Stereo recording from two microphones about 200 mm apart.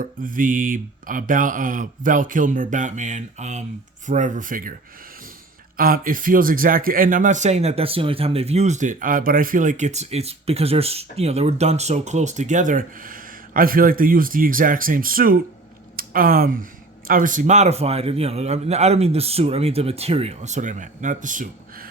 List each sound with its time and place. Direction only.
0.0 s speech: 45° right (ahead or behind)
5.7 s speech: 45° right (ahead or behind)